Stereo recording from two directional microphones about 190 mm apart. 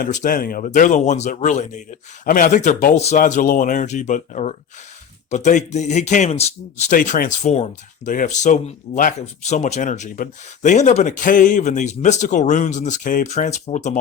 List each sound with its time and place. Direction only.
0.0 s speech: 45° left (ahead or behind)